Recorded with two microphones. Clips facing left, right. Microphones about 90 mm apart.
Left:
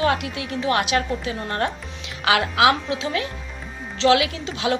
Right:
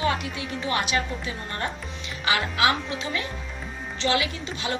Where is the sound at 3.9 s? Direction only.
90° left.